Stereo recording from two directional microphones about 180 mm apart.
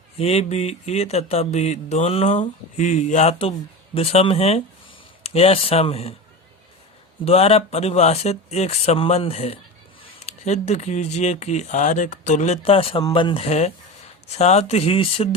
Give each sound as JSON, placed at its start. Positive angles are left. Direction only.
{"t": 0.2, "sound": "mantra", "side_deg": 35}
{"t": 7.3, "sound": "mantra", "side_deg": 35}